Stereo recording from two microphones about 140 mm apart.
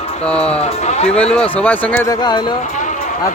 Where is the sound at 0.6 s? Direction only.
50° left (ahead or behind).